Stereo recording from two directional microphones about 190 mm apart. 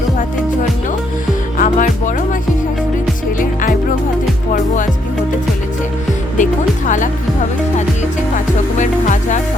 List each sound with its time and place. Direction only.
1.5 s music: 45° left (ahead or behind)
3.3 s music: 45° left (ahead or behind)
6.3 s music: 40° left (ahead or behind)
8.8 s music: 40° left (ahead or behind)